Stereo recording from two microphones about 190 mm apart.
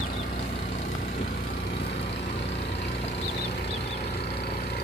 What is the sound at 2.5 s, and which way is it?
Vehicle, 65° left (ahead or behind).